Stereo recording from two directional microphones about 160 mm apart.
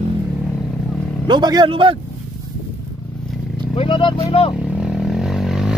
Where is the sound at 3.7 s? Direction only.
35° left (ahead or behind).